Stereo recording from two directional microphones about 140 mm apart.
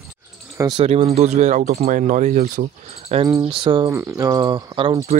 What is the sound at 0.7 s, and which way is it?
Speech, 45° right (ahead or behind).